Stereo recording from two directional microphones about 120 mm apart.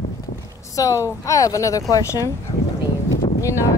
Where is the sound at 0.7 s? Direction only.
25° left (ahead or behind).